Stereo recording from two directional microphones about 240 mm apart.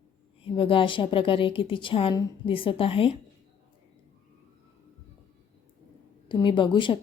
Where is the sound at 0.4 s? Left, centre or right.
Left.